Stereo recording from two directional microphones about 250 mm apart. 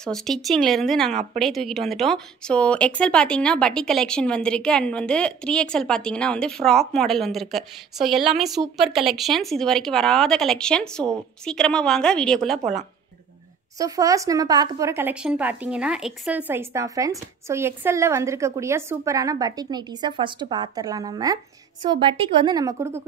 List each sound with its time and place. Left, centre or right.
0.0 s speech: centre
13.7 s speech: centre